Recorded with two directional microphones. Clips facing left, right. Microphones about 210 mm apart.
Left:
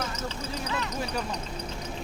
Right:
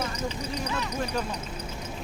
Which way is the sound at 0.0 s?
15° right (ahead or behind).